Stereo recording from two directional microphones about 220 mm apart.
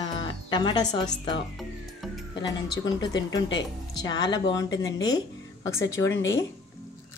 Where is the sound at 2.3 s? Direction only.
20° left (ahead or behind).